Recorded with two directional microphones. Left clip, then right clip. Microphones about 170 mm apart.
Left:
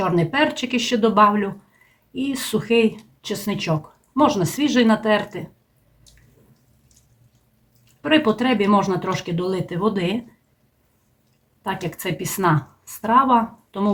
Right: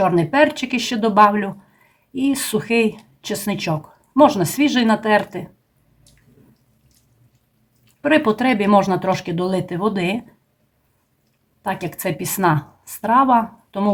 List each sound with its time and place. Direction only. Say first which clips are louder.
0.0 s speech: right 4 dB; 35° right (ahead or behind)
8.0 s speech: right 2 dB; 40° right (ahead or behind)
11.6 s speech: right 3 dB; 40° right (ahead or behind)